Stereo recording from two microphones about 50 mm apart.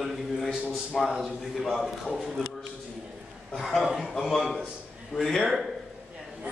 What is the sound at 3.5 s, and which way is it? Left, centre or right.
A man's voice, centre.